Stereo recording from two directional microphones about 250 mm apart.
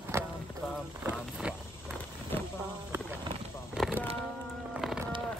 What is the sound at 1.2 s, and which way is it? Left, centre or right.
Vehicle, centre.